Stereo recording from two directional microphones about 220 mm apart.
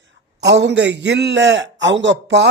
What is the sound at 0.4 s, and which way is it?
A man's voice, 55° right (ahead or behind).